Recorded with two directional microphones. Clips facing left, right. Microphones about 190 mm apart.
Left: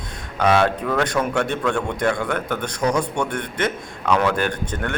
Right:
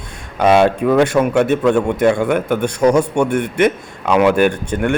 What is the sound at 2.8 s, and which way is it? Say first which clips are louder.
Speech: right 8 dB; 25° right (ahead or behind).